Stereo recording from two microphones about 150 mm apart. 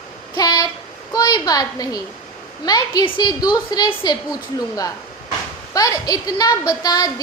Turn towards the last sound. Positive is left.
turn(degrees=25)  # may be behind; listen again after turning